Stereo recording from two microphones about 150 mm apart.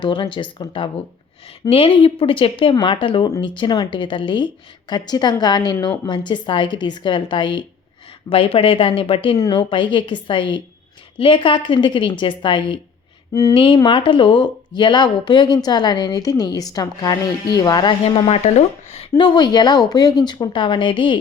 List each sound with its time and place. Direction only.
0.0 s a woman's voice: 30° left (ahead or behind)
18.0 s a woman's voice: 40° left (ahead or behind)